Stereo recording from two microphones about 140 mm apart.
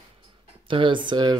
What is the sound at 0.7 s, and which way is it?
Speech, 35° right (ahead or behind).